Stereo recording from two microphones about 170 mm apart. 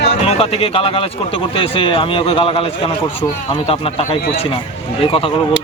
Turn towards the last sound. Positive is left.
turn(degrees=30)  # may be behind; listen again after turning